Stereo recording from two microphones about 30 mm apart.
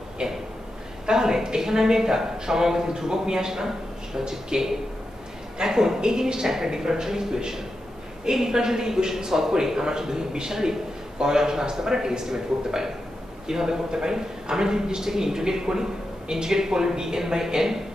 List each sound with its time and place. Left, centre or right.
0.2 s a man's voice: right